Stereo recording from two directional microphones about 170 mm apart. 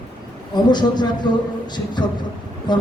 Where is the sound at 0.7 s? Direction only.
25° left (ahead or behind).